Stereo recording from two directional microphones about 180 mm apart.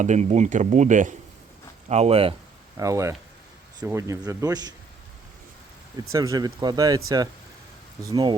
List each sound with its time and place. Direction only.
0.0 s speech: 40° right (ahead or behind)
2.7 s speech: 20° right (ahead or behind)
6.1 s speech: 20° right (ahead or behind)